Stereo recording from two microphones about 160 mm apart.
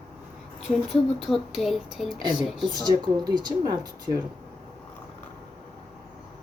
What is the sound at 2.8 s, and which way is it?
Speech, 25° right (ahead or behind).